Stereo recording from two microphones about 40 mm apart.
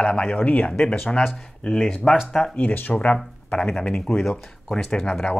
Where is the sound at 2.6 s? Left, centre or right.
Left.